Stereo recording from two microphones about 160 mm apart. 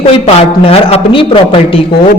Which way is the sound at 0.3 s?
40° left (ahead or behind).